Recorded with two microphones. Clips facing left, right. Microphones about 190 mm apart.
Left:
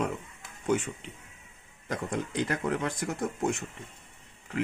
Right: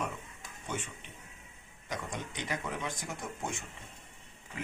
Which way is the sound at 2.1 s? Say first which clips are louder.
Left 10 dB; 80° left.